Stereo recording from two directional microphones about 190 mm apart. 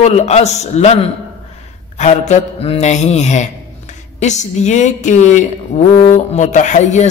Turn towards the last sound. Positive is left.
turn(degrees=40)  # may be behind; listen again after turning